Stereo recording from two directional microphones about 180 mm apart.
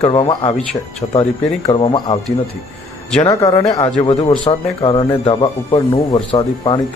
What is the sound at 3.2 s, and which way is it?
Speech, 25° left (ahead or behind).